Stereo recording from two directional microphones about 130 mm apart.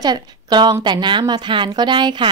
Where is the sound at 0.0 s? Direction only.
35° right (ahead or behind).